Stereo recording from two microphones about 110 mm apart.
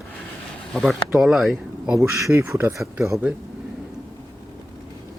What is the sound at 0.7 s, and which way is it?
Speech, centre (ahead or behind).